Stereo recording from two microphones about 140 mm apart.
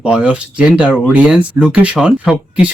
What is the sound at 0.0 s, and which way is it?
A man's voice, 5° right (ahead or behind).